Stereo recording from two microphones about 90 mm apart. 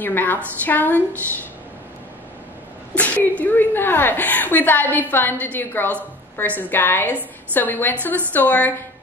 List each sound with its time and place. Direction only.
0.0 s a woman's voice: 20° left (ahead or behind)
2.9 s a woman's voice: 15° left (ahead or behind)